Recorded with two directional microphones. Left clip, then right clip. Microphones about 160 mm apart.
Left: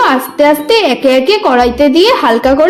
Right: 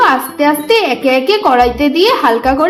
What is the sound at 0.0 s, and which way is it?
A woman's voice, 45° left (ahead or behind).